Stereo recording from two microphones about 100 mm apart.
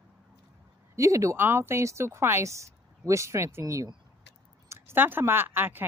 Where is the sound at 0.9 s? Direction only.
35° right (ahead or behind).